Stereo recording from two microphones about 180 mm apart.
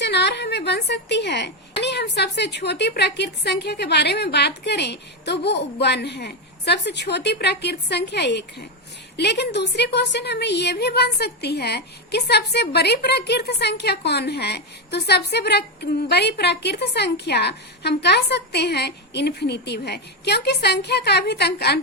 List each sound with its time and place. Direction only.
0.0 s a woman's voice: 70° left (ahead or behind)